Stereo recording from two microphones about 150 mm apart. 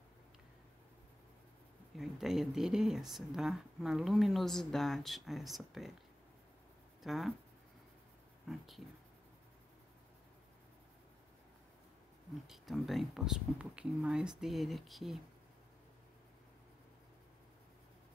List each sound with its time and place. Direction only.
2.0 s speech: centre (ahead or behind)
7.0 s speech: centre (ahead or behind)
8.5 s speech: centre (ahead or behind)
12.4 s speech: centre (ahead or behind)